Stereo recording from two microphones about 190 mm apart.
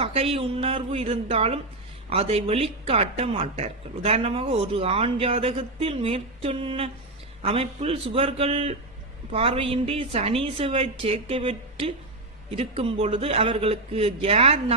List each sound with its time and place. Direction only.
0.0 s a man's voice: 30° right (ahead or behind)